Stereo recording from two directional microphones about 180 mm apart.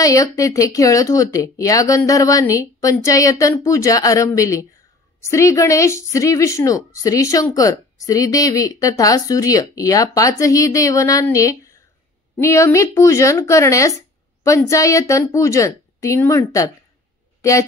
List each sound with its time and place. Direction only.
0.0 s speech: 20° left (ahead or behind)